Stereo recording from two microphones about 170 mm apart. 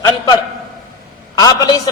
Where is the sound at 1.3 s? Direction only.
20° left (ahead or behind).